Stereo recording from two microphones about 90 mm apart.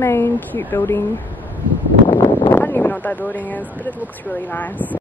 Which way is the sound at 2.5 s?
20° left (ahead or behind).